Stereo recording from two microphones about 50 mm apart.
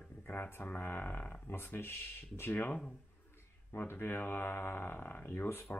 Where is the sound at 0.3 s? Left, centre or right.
Left.